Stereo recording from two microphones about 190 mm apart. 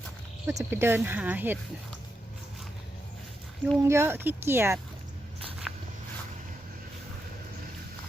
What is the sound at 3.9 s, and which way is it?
Speech, 15° right (ahead or behind).